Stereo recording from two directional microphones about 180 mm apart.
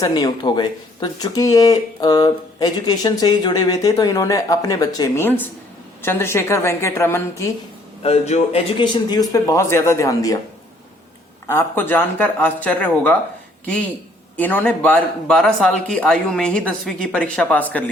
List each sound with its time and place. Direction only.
0.0 s speech: 20° left (ahead or behind)
8.0 s a man's voice: 35° left (ahead or behind)
8.8 s speech: 25° left (ahead or behind)
11.4 s speech: 10° left (ahead or behind)
14.3 s speech: 10° left (ahead or behind)